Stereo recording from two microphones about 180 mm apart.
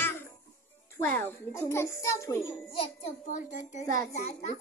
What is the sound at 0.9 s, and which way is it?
A child's voice, 10° left (ahead or behind).